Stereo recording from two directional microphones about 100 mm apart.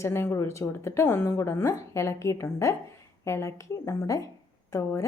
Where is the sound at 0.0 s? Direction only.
25° left (ahead or behind).